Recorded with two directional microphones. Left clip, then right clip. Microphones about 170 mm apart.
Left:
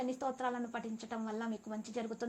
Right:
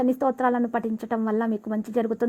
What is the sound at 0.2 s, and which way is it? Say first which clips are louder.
A woman's voice: right 14 dB; 40° right (ahead or behind).